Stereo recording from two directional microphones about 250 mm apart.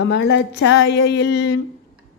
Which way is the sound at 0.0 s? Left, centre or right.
Left.